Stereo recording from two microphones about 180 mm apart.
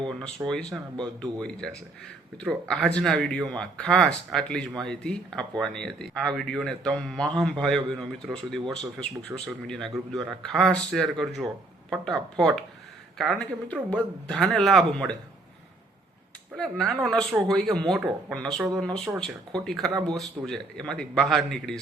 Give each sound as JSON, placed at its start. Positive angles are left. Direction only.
{"t": 0.0, "sound": "speech", "side_deg": 0}
{"t": 9.3, "sound": "speech", "side_deg": -10}
{"t": 9.6, "sound": "speech", "side_deg": 5}
{"t": 16.6, "sound": "speech", "side_deg": 5}
{"t": 19.9, "sound": "speech", "side_deg": -25}
{"t": 20.1, "sound": "speech", "side_deg": 0}